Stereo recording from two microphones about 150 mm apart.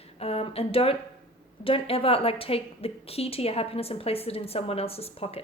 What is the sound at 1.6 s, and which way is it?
A woman's voice, 35° left (ahead or behind).